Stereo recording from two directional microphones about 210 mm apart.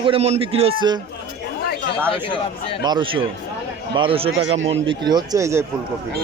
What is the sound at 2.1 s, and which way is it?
Speech, 25° left (ahead or behind).